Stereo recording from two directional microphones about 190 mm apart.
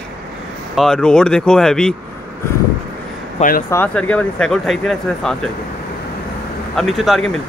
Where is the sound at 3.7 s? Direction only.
10° left (ahead or behind).